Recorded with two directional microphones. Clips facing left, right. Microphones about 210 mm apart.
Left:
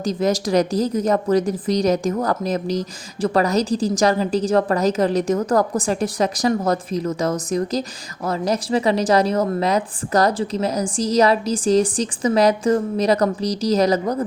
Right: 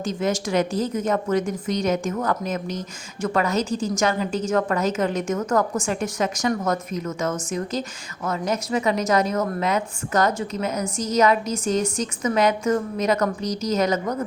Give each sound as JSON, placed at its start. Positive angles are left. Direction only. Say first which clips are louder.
{"t": 0.0, "sound": "a woman's voice", "louder": "left 4 dB", "side_deg": 35}